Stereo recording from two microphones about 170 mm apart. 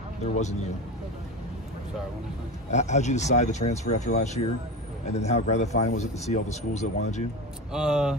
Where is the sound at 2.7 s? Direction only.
45° left (ahead or behind).